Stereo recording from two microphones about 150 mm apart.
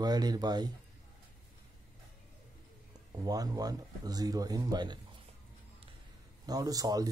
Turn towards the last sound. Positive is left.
turn(degrees=-25)  # may be behind; listen again after turning